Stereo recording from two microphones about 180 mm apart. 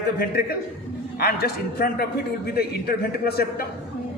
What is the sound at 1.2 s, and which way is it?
A man's voice, 60° left (ahead or behind).